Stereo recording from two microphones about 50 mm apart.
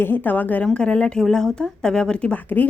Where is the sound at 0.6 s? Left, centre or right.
Centre.